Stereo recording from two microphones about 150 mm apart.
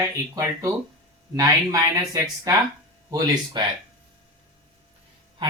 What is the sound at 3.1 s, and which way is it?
Speech, 25° right (ahead or behind).